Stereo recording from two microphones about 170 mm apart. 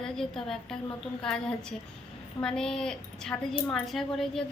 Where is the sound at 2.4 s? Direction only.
5° left (ahead or behind).